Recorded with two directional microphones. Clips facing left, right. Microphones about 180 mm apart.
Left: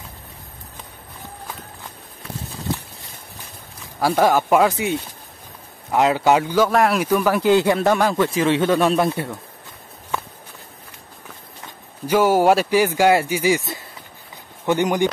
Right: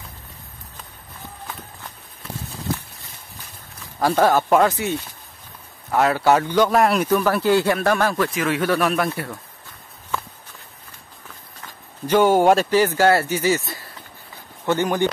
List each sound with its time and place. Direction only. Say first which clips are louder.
4.0 s speech: even; 10° left (ahead or behind)
7.1 s speech: left 1 dB; 15° left (ahead or behind)
12.1 s speech: even; 5° left (ahead or behind)